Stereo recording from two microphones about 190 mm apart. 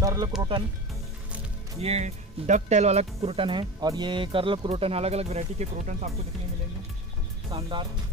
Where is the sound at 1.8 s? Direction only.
35° right (ahead or behind).